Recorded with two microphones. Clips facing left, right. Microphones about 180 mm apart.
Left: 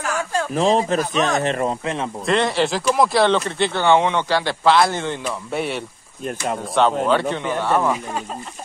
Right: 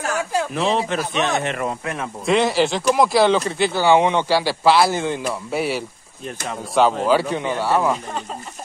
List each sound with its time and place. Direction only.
0.6 s speech: 40° left (ahead or behind)
2.2 s speech: centre (ahead or behind)